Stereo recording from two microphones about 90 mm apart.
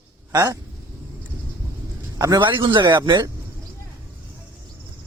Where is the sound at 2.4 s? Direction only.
60° right (ahead or behind).